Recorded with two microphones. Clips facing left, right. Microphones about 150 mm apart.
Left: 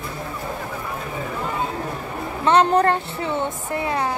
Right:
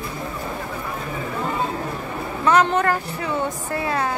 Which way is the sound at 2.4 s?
30° left (ahead or behind).